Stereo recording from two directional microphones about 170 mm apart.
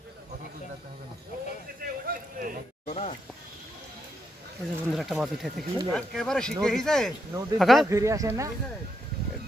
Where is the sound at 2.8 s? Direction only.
40° left (ahead or behind).